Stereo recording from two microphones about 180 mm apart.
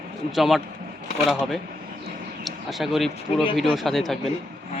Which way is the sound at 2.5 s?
Centre (ahead or behind).